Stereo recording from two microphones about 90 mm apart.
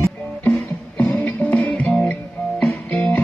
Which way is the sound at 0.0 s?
20° left (ahead or behind).